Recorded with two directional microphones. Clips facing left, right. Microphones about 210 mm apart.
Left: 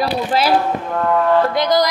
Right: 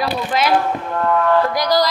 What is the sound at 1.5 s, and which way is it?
Music, 20° left (ahead or behind).